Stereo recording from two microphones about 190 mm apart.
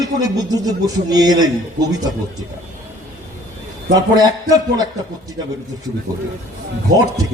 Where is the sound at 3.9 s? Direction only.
20° right (ahead or behind).